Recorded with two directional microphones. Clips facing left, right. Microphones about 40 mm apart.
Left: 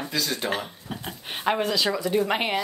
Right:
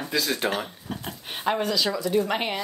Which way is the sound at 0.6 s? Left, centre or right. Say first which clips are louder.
Right 1 dB; centre.